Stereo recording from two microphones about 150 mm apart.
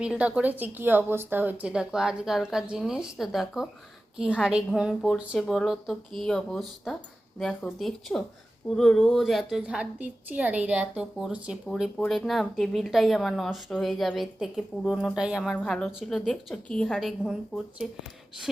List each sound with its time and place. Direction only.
0.0 s a woman's voice: 10° right (ahead or behind)